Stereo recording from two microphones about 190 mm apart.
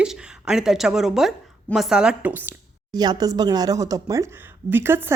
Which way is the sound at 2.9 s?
20° right (ahead or behind).